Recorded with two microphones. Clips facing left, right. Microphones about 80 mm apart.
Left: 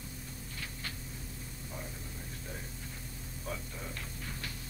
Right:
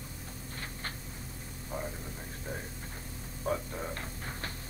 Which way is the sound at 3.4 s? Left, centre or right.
Right.